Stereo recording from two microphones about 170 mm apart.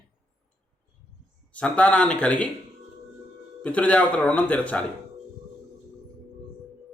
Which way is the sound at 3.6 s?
10° left (ahead or behind).